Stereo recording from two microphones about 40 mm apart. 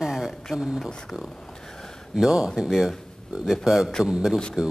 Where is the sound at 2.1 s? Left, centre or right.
Centre.